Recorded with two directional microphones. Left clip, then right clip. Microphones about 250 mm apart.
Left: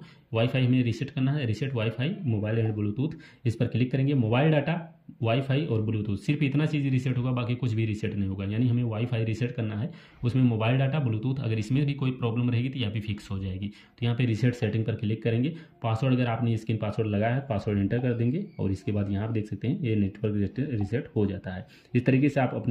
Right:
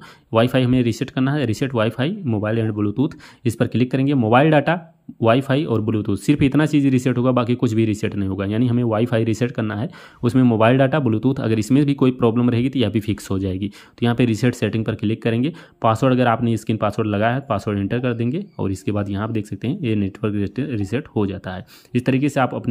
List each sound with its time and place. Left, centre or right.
0.3 s speech: centre